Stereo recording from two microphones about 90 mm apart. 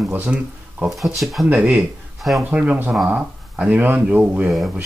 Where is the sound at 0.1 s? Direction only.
15° right (ahead or behind).